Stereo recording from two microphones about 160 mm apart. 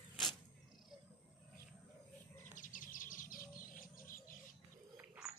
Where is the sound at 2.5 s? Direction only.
55° left (ahead or behind).